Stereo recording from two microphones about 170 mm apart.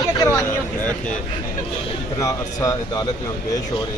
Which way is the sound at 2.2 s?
20° left (ahead or behind).